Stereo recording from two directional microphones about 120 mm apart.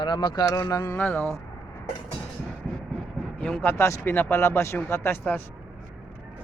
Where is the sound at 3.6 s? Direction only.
20° left (ahead or behind).